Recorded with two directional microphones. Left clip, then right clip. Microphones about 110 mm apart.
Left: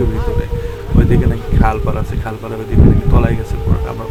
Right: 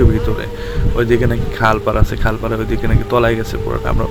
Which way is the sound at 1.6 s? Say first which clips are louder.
Right 4 dB; 45° right (ahead or behind).